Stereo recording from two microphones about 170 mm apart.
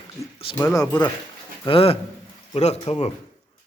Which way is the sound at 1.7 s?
35° left (ahead or behind).